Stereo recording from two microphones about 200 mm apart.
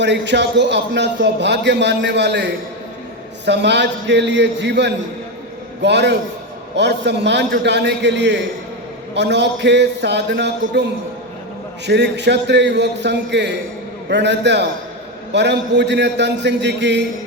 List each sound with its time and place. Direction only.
0.0 s a man's voice: 60° right (ahead or behind)
11.9 s a man's voice: 60° right (ahead or behind)